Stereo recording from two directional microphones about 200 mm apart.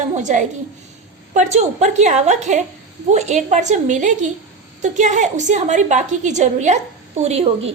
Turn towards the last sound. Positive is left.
turn(degrees=-30)  # may be behind; listen again after turning